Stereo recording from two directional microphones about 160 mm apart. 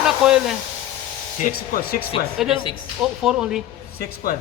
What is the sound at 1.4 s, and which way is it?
Speech, 60° left (ahead or behind).